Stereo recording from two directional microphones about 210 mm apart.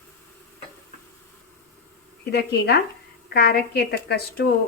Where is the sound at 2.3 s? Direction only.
55° left (ahead or behind).